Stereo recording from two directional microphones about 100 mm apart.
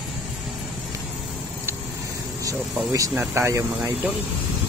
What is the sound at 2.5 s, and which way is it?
Speech, 35° right (ahead or behind).